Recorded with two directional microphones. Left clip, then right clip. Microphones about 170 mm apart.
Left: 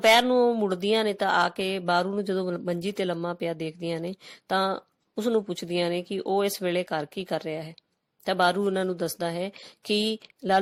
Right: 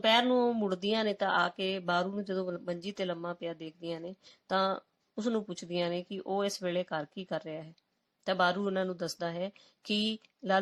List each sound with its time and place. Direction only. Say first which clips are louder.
0.0 s speech: left 7 dB; 35° left (ahead or behind)